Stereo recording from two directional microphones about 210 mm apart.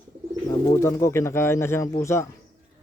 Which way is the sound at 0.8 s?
15° left (ahead or behind).